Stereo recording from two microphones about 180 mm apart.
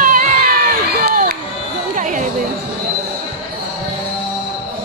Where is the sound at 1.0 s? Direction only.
55° right (ahead or behind).